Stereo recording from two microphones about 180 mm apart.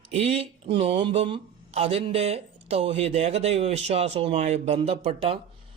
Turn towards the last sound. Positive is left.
turn(degrees=-30)  # may be behind; listen again after turning